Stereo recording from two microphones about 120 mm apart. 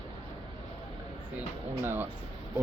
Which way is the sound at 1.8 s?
15° right (ahead or behind).